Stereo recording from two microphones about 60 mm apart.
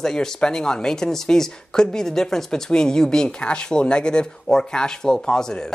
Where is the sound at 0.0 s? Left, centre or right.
Centre.